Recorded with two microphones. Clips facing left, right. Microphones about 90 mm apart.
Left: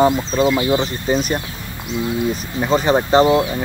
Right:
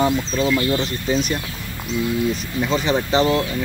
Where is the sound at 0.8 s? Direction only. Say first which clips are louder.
Left 2 dB; 40° left (ahead or behind).